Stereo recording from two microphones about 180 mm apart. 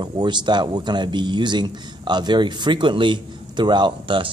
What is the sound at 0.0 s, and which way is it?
Speech, 25° right (ahead or behind).